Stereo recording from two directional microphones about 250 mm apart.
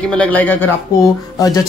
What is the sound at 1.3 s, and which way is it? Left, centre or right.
Music, centre.